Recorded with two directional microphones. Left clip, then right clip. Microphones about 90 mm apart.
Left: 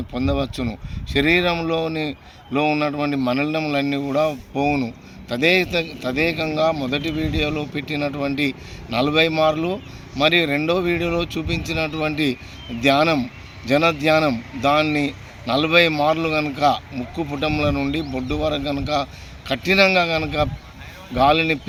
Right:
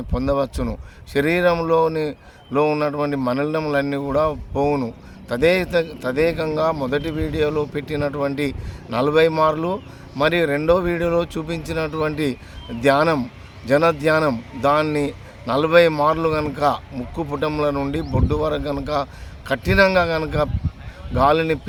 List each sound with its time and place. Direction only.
0.1 s a man's voice: 50° right (ahead or behind)